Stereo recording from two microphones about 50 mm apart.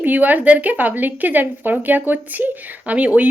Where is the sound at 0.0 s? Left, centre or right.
Right.